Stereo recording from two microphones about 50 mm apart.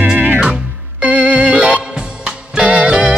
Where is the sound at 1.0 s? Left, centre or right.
Right.